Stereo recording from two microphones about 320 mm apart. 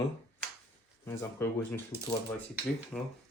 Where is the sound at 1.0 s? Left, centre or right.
Centre.